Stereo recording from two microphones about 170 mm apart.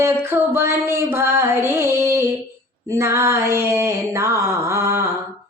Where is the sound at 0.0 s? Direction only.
15° right (ahead or behind).